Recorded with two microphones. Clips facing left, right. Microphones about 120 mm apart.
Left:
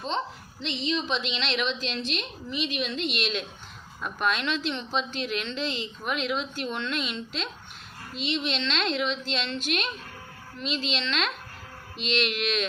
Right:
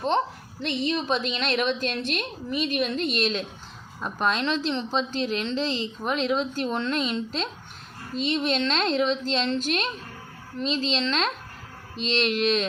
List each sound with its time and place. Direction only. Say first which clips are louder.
0.6 s a woman's voice: right 3 dB; 55° right (ahead or behind); by 12.6 s 35° right (ahead or behind)